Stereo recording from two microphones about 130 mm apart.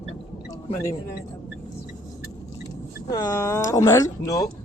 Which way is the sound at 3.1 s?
25° left (ahead or behind).